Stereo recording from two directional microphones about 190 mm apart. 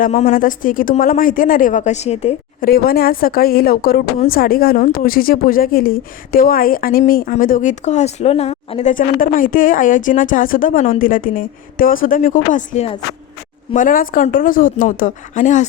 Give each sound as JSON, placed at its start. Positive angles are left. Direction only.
{"t": 0.0, "sound": "speech", "side_deg": 40}
{"t": 2.6, "sound": "speech", "side_deg": 50}
{"t": 13.7, "sound": "speech", "side_deg": 45}